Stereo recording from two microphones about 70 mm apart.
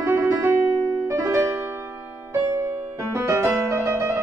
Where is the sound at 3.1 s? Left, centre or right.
Right.